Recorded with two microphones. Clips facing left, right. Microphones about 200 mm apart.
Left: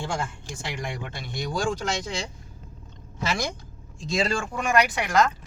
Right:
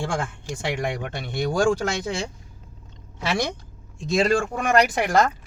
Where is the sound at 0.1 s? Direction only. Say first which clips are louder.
Right 3 dB; 60° right (ahead or behind).